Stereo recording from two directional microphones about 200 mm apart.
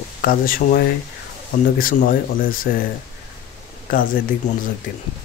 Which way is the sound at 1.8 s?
45° left (ahead or behind).